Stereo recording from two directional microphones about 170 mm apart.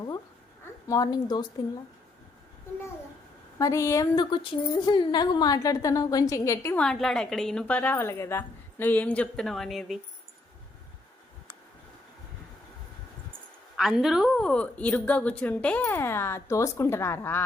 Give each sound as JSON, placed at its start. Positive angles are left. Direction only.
{"t": 0.9, "sound": "a woman's voice", "side_deg": 20}
{"t": 3.6, "sound": "a woman's voice", "side_deg": 20}
{"t": 6.8, "sound": "a woman's voice", "side_deg": 5}
{"t": 13.7, "sound": "a woman's voice", "side_deg": 0}